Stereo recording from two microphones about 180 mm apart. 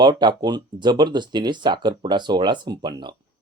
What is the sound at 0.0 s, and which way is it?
Speech, 25° right (ahead or behind).